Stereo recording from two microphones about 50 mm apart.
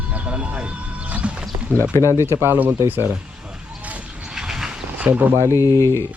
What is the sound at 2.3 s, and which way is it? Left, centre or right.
Speech, right.